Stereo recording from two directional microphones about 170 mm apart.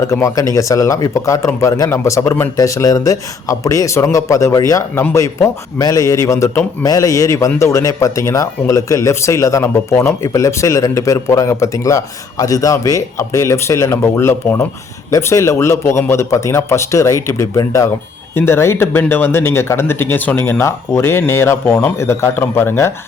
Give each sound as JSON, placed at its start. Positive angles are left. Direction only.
{"t": 0.1, "sound": "a man's voice", "side_deg": 20}